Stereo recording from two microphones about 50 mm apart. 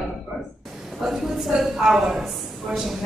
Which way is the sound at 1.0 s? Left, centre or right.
Centre.